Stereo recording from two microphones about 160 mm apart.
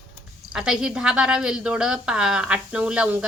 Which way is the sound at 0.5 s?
5° right (ahead or behind).